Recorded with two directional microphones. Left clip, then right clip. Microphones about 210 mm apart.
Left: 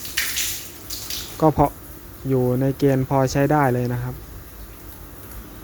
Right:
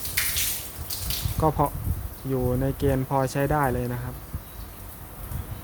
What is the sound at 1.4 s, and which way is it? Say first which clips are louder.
Speech: left 6 dB; 20° left (ahead or behind).